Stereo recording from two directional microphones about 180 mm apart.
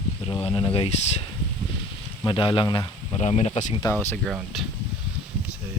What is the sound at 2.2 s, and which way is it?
Speech, 25° left (ahead or behind).